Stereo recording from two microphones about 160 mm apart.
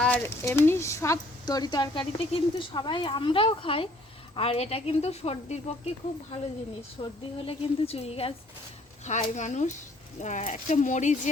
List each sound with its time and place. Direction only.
0.0 s a sound: 10° left (ahead or behind)
0.4 s a woman's voice: 15° left (ahead or behind); by 5.9 s 40° left (ahead or behind)
7.0 s speech: 35° left (ahead or behind)